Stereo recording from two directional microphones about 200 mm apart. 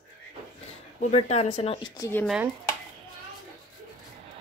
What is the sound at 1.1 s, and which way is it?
Speech, 30° left (ahead or behind).